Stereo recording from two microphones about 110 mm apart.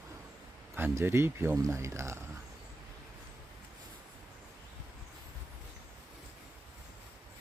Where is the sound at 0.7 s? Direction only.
20° right (ahead or behind).